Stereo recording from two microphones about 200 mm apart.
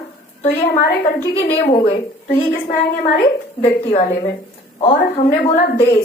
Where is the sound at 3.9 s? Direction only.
35° left (ahead or behind).